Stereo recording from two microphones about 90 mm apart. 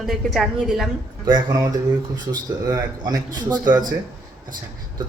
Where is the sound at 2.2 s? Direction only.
50° right (ahead or behind).